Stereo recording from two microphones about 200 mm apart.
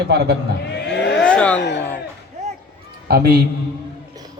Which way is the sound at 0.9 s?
60° left (ahead or behind).